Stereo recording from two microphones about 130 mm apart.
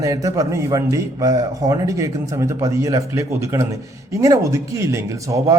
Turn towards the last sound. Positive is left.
turn(degrees=-25)  # may be behind; listen again after turning